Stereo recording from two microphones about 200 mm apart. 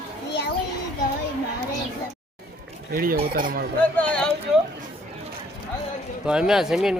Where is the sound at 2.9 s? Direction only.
45° right (ahead or behind).